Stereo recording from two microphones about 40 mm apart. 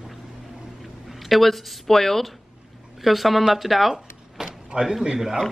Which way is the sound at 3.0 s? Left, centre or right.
Centre.